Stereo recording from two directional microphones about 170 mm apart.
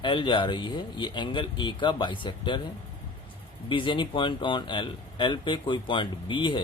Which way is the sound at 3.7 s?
30° left (ahead or behind).